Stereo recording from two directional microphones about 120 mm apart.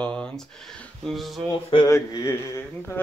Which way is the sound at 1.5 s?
40° left (ahead or behind).